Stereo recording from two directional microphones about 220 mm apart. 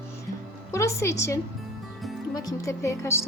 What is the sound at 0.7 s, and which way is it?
A woman's voice, 15° left (ahead or behind).